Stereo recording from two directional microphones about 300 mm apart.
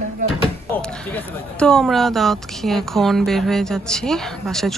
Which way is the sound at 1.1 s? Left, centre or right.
Centre.